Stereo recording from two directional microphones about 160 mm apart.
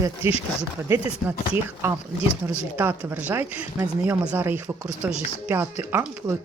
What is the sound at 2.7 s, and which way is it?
Speech, 10° right (ahead or behind).